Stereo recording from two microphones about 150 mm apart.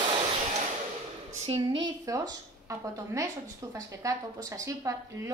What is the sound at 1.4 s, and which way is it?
Speech, 40° right (ahead or behind).